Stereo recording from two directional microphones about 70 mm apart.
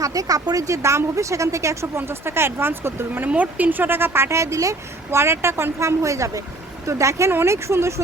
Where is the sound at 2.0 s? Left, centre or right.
Right.